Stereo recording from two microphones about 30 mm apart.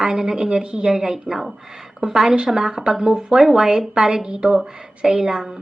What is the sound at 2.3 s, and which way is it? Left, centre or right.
Speech, right.